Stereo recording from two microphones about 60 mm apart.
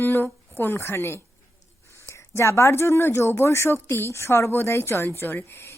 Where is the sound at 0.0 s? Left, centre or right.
Left.